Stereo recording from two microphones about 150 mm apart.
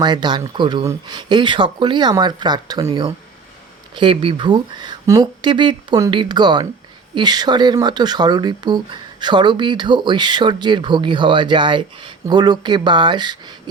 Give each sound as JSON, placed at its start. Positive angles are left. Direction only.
{"t": 0.0, "sound": "speech", "side_deg": -30}